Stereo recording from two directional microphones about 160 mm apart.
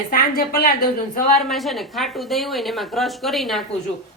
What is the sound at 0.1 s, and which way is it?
Speech, 65° left (ahead or behind).